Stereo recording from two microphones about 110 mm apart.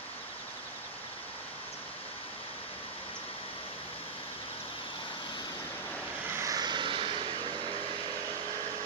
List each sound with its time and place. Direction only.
6.3 s vehicle: 30° right (ahead or behind); by 7.5 s 50° right (ahead or behind)